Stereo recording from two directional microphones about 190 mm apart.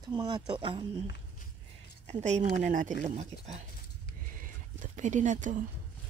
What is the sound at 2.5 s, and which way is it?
Speech, 45° right (ahead or behind).